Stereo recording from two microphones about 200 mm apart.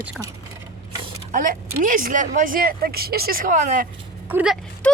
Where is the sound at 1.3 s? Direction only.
40° right (ahead or behind).